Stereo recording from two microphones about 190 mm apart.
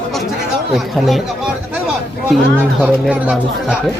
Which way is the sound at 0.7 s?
Centre (ahead or behind).